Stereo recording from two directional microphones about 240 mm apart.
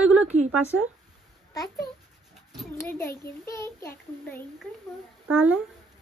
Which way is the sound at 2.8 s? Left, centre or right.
Centre.